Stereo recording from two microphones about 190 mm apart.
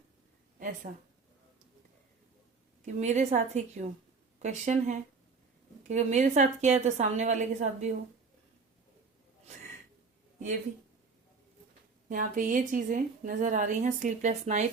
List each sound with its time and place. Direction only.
2.8 s a woman's voice: 40° right (ahead or behind)
12.0 s a woman's voice: 45° right (ahead or behind)